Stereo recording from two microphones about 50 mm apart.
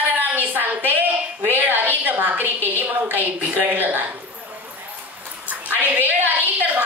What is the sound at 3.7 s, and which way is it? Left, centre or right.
Speech, right.